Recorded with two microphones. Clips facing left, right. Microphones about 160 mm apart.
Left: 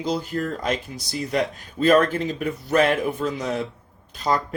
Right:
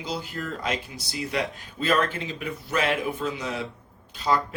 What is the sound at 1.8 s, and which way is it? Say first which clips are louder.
Speech: left 7 dB; 45° left (ahead or behind).